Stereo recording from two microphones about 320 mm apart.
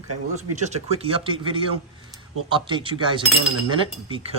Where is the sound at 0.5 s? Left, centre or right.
Right.